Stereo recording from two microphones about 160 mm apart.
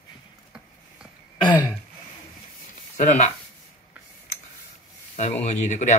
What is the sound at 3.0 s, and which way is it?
Speech, 45° left (ahead or behind).